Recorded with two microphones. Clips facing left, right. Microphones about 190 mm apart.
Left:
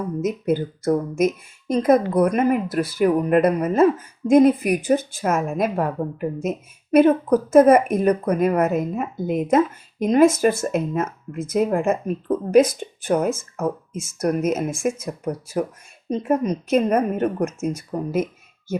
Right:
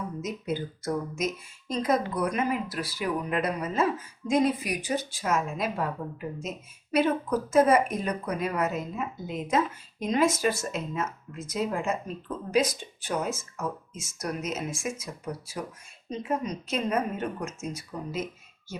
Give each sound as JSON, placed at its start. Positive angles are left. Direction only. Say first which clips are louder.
{"t": 0.2, "sound": "a woman's voice", "louder": "left 11 dB", "side_deg": 55}